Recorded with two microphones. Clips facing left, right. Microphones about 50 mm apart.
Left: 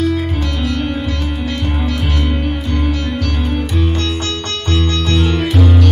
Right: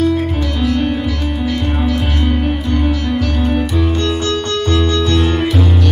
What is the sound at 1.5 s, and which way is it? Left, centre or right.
Music, centre.